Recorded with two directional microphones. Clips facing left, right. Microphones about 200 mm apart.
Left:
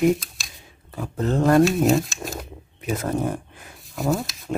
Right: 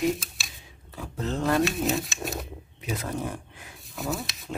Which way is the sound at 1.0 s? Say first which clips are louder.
Left 7 dB; 50° left (ahead or behind).